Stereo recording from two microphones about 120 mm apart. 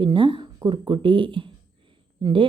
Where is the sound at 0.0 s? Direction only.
45° right (ahead or behind).